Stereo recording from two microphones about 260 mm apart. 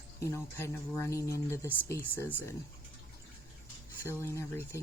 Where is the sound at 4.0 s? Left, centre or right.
Centre.